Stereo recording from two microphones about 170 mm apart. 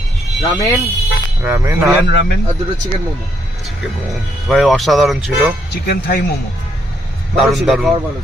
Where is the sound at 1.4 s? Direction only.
15° right (ahead or behind).